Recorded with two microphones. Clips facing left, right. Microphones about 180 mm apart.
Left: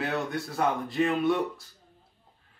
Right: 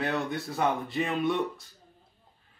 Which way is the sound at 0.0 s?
Centre (ahead or behind).